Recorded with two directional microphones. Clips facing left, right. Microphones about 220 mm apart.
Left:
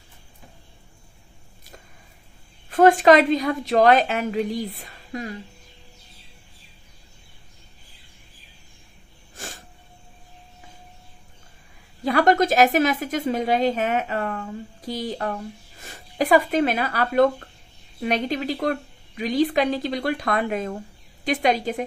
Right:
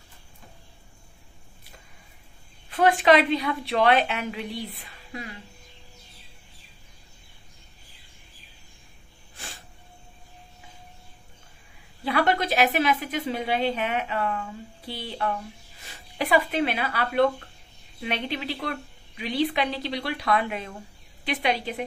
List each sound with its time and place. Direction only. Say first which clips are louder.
2.7 s a woman's voice: left 5 dB; 45° left (ahead or behind)
9.3 s a sound: left 6 dB; 45° left (ahead or behind)
12.0 s a woman's voice: left 6 dB; 45° left (ahead or behind)